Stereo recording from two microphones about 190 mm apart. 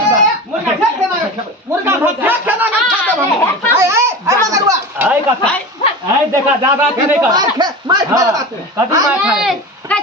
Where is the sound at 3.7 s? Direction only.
15° right (ahead or behind).